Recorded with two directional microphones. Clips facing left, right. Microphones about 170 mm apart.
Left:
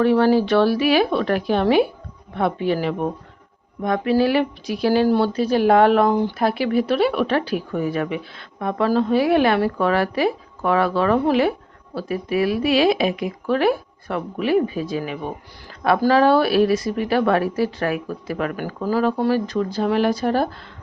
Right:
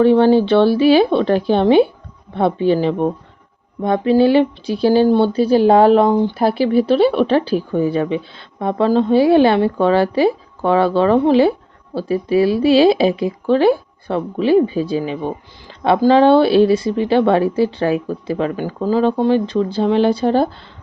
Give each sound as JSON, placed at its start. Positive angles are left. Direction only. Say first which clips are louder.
{"t": 0.0, "sound": "speech", "louder": "right 5 dB", "side_deg": -30}